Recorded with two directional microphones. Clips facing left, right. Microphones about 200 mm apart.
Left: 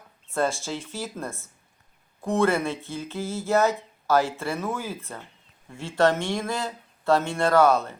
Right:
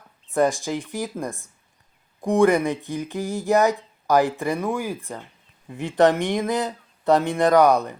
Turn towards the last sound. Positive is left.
turn(degrees=-15)  # may be behind; listen again after turning